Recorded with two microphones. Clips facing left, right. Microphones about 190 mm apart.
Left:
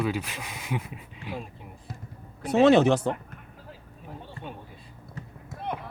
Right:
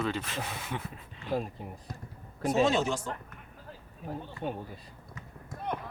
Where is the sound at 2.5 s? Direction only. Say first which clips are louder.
Left 8 dB; 65° left (ahead or behind).